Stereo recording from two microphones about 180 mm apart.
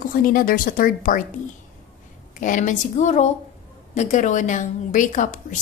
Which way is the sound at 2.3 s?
45° left (ahead or behind).